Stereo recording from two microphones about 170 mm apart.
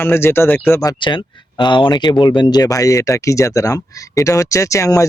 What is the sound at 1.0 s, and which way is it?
Speech, 30° left (ahead or behind).